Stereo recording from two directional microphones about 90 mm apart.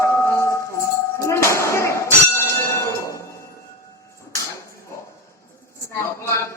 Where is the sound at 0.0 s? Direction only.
30° left (ahead or behind).